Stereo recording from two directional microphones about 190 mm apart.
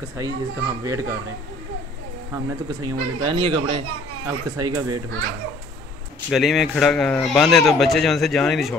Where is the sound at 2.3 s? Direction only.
20° right (ahead or behind).